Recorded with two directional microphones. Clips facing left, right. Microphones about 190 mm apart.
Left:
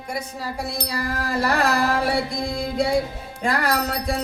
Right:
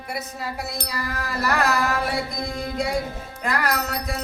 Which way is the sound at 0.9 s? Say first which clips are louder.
Left 6 dB; 30° left (ahead or behind).